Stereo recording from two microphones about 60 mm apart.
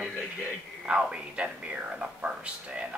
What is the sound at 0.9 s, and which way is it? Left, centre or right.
Speech, centre.